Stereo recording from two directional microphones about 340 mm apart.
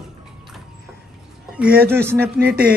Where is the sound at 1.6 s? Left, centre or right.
Centre.